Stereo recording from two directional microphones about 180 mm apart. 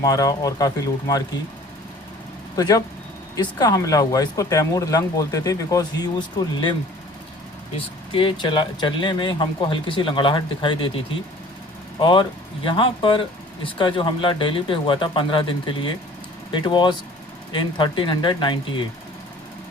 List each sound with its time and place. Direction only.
0.0 s speech: 20° left (ahead or behind)
2.6 s speech: 20° left (ahead or behind)
7.8 s speech: 30° left (ahead or behind)
11.9 s speech: 25° left (ahead or behind)